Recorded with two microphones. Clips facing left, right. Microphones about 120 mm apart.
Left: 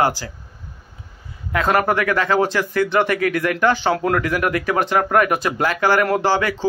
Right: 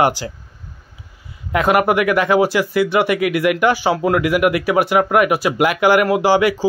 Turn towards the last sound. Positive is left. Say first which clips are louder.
# right 4 dB
turn(degrees=-15)  # may be behind; listen again after turning